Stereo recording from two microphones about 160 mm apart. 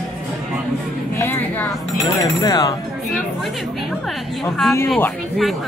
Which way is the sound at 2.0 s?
20° left (ahead or behind).